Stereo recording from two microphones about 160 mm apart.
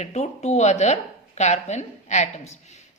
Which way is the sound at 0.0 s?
45° left (ahead or behind).